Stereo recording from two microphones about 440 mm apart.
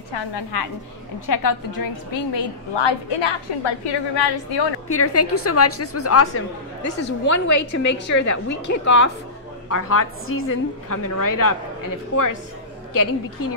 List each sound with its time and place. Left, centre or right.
1.2 s a woman's voice: left
2.3 s a woman's voice: left
4.8 s a woman's voice: left
10.9 s a woman's voice: left
12.1 s a woman's voice: left
12.9 s a woman's voice: left